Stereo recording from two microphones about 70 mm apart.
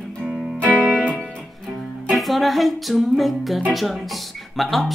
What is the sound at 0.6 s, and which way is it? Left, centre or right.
Music, left.